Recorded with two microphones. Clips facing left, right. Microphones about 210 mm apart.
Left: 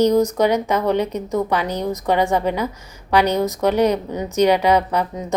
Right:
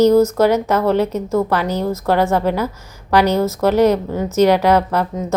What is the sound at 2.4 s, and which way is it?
Speech, 5° right (ahead or behind).